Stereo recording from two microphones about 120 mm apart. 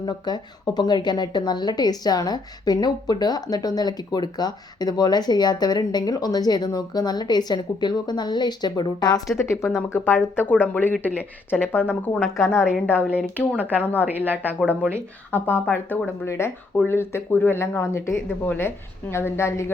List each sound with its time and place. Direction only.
0.0 s a woman's voice: 35° left (ahead or behind)
9.5 s speech: 20° left (ahead or behind)
12.5 s a woman's voice: 5° right (ahead or behind)
15.3 s speech: 15° left (ahead or behind)